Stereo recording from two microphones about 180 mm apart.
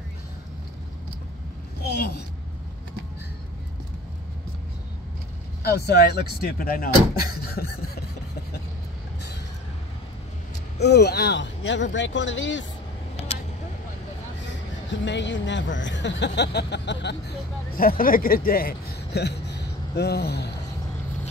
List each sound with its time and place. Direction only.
1.9 s a woman's voice: 65° left (ahead or behind)
5.6 s speech: 65° left (ahead or behind)
10.8 s speech: 70° left (ahead or behind); by 12.6 s 90° left
14.9 s speech: 80° left
17.7 s speech: 55° left (ahead or behind)